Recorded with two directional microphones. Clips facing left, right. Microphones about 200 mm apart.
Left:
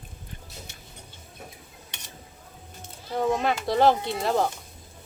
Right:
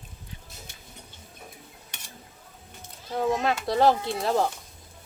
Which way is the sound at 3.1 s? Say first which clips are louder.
Left 1 dB; centre (ahead or behind).